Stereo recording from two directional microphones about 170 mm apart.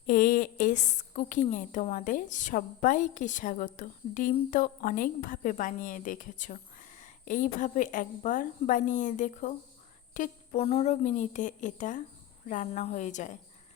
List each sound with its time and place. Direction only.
0.0 s a woman's voice: 55° left (ahead or behind)